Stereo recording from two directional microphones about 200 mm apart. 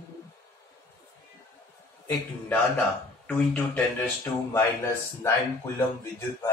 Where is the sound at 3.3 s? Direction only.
10° left (ahead or behind).